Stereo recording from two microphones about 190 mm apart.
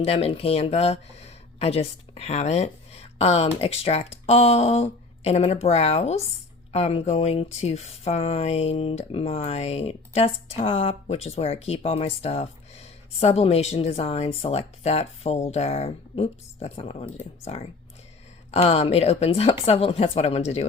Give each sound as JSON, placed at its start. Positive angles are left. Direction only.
{"t": 0.0, "sound": "speech", "side_deg": 30}